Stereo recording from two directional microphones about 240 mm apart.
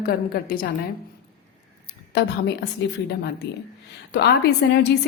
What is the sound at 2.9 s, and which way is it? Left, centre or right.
A woman's voice, left.